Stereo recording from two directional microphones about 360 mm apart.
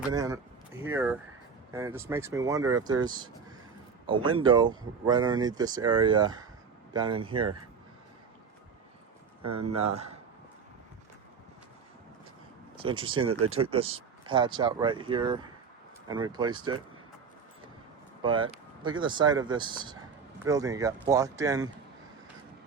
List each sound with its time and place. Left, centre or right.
0.1 s speech: centre
9.7 s speech: centre
12.7 s speech: centre
13.2 s speech: right
13.6 s speech: centre
18.2 s speech: centre